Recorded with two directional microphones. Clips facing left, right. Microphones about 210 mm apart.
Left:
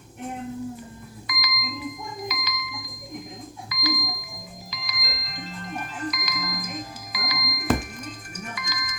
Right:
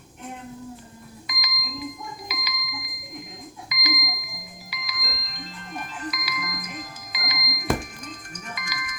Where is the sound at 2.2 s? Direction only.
10° right (ahead or behind).